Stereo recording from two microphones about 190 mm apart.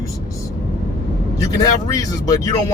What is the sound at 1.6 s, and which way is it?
Speech, 20° left (ahead or behind).